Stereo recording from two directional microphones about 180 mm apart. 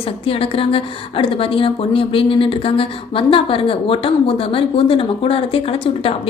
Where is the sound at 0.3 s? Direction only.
30° left (ahead or behind).